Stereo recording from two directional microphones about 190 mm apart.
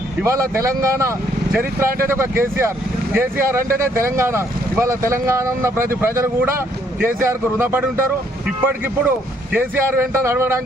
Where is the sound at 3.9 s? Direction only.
15° right (ahead or behind).